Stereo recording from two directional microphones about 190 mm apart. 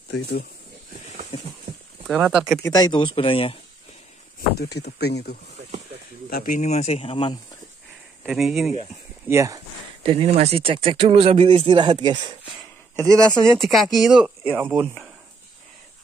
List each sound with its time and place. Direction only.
0.1 s speech: 60° left (ahead or behind)
1.3 s a sound: 30° left (ahead or behind)
2.0 s speech: 5° right (ahead or behind)
2.6 s speech: 20° left (ahead or behind)
4.6 s speech: 60° left (ahead or behind)
6.3 s speech: 45° left (ahead or behind); by 7.3 s 30° left (ahead or behind)
9.3 s speech: 15° right (ahead or behind)
10.0 s speech: 30° right (ahead or behind)
12.9 s speech: 5° left (ahead or behind)